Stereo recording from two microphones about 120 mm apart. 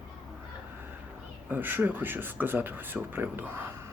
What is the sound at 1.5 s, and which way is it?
Speech, 15° right (ahead or behind).